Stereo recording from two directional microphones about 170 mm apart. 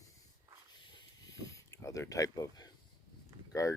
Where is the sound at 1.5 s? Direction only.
20° left (ahead or behind).